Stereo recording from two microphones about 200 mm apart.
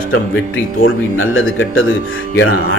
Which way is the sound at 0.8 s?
85° left.